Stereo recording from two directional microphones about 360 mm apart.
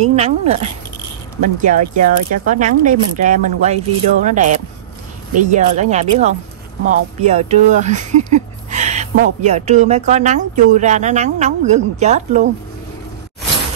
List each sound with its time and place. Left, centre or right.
0.0 s speech: centre
7.2 s speech: centre